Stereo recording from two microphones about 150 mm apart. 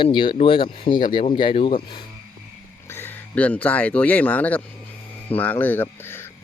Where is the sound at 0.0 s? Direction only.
35° left (ahead or behind).